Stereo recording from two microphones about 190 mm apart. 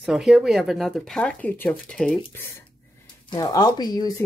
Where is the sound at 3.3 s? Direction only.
20° left (ahead or behind).